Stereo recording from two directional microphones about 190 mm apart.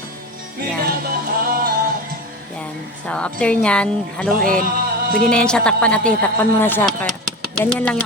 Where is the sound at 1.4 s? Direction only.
50° right (ahead or behind).